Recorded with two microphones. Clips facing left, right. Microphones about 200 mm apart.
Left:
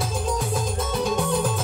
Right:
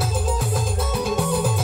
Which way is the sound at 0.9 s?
5° right (ahead or behind).